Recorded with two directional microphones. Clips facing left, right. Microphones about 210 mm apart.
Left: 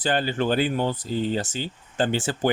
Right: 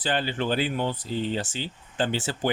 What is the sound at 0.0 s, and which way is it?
Speech, 45° left (ahead or behind).